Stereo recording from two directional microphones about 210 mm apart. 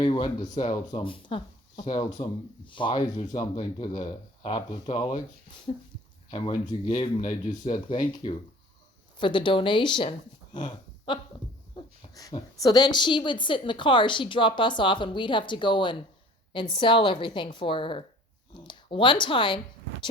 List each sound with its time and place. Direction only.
0.0 s a woman's voice: 20° left (ahead or behind)
5.7 s dog: 30° left (ahead or behind)
6.3 s a woman's voice: 20° left (ahead or behind)
12.0 s a sound: 25° left (ahead or behind)
12.5 s a woman's voice: 20° left (ahead or behind)